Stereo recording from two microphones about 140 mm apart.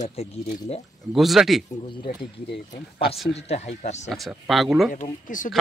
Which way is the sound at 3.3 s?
50° left (ahead or behind).